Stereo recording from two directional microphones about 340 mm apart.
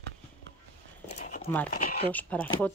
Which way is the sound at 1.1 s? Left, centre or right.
Left.